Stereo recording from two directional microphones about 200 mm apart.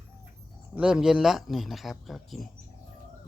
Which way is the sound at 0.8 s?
5° right (ahead or behind).